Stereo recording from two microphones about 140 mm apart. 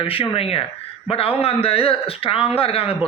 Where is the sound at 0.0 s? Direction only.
40° left (ahead or behind).